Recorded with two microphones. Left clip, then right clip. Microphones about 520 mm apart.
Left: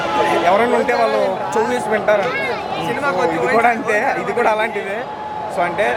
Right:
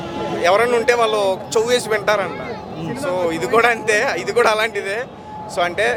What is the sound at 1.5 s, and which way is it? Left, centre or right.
Speech, right.